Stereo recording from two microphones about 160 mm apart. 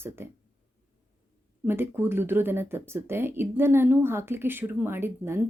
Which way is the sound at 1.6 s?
15° right (ahead or behind).